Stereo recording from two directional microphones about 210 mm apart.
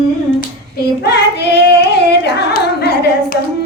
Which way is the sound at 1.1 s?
50° left (ahead or behind).